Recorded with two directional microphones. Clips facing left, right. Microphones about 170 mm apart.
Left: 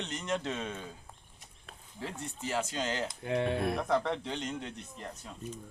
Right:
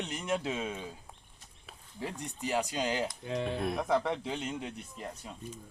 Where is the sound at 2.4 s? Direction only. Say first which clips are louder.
Right 2 dB; 15° right (ahead or behind).